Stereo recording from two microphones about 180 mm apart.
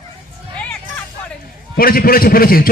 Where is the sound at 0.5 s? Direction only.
5° left (ahead or behind).